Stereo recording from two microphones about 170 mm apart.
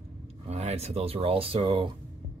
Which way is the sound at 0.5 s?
40° right (ahead or behind).